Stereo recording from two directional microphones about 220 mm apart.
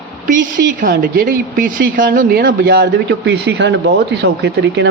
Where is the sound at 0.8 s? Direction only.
40° right (ahead or behind).